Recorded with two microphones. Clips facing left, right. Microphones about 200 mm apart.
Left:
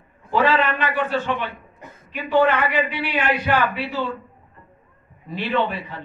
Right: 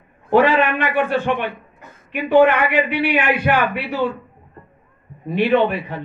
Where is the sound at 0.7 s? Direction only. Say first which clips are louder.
Right 3 dB; 15° right (ahead or behind).